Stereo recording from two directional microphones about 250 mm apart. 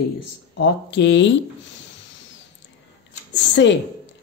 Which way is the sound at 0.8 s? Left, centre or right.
Left.